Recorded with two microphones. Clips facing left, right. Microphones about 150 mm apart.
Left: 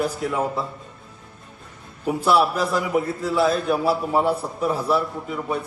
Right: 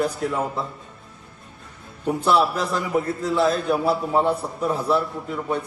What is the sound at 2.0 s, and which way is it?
A man's voice, 5° left (ahead or behind).